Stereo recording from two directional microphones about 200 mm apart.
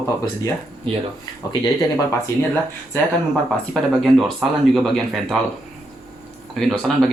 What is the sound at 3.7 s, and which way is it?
Speech, centre (ahead or behind).